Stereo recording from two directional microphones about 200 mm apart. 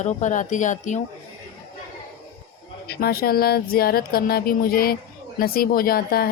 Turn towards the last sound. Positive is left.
turn(degrees=50)  # may be behind; listen again after turning